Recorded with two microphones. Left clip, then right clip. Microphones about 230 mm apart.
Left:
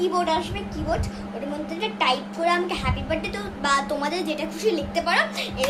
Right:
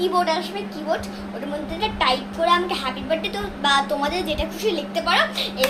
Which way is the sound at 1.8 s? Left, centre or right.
Centre.